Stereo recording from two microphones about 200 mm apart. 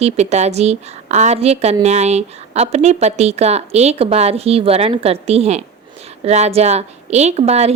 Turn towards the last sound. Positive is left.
turn(degrees=-30)  # may be behind; listen again after turning